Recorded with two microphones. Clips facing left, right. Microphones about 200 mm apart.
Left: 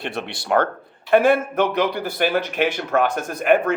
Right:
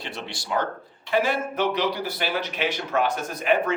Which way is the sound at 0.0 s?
60° left (ahead or behind).